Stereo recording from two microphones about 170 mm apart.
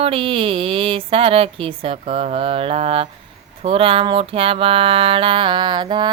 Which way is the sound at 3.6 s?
30° right (ahead or behind).